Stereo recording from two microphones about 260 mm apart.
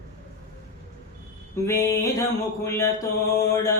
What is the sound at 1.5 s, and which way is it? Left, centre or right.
Mantra, centre.